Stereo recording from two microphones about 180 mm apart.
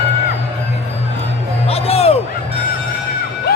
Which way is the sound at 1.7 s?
35° left (ahead or behind).